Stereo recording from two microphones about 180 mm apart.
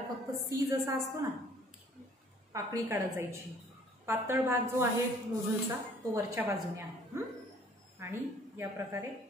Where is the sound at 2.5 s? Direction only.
20° right (ahead or behind).